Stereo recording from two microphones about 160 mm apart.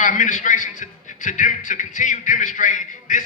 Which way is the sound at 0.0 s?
50° left (ahead or behind).